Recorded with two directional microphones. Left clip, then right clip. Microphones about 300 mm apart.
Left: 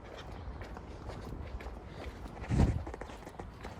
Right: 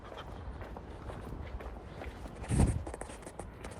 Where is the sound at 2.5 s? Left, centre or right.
Centre.